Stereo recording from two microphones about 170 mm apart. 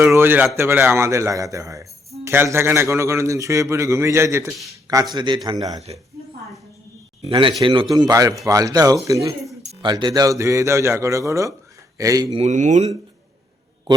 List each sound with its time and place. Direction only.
0.0 s a man's voice: 10° right (ahead or behind)
7.3 s a man's voice: 30° right (ahead or behind)
12.3 s speech: 40° right (ahead or behind)